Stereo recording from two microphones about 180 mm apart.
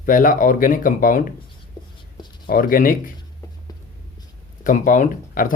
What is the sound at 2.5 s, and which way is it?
Speech, 50° left (ahead or behind).